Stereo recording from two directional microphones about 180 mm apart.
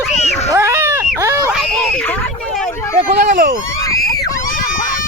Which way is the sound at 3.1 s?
55° right (ahead or behind).